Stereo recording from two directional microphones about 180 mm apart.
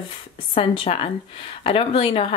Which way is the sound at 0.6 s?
30° left (ahead or behind).